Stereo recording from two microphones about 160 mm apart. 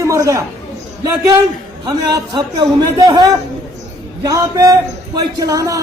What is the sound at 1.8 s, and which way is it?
A man's voice, 25° right (ahead or behind).